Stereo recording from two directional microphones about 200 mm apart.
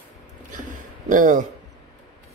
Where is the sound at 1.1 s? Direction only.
40° right (ahead or behind).